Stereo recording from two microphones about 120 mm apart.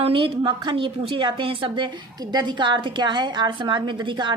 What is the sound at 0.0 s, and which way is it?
A woman's voice, 45° right (ahead or behind).